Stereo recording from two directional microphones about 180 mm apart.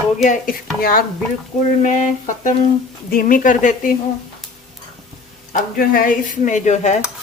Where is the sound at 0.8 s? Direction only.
55° left (ahead or behind).